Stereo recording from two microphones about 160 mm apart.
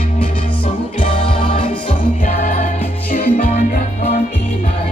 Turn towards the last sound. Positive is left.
turn(degrees=50)  # may be behind; listen again after turning